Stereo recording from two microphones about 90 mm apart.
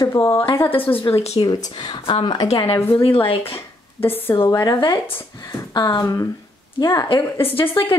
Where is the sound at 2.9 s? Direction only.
75° left (ahead or behind); by 3.6 s 90° left.